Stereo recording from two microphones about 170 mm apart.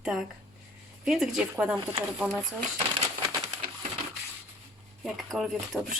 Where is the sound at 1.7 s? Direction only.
25° right (ahead or behind).